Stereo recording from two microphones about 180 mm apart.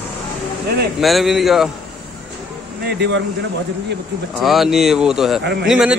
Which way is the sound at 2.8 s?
70° right (ahead or behind).